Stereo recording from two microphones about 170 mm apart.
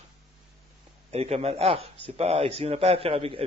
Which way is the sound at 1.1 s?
35° right (ahead or behind).